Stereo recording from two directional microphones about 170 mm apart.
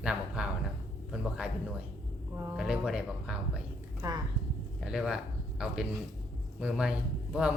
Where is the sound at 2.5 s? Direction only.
5° right (ahead or behind).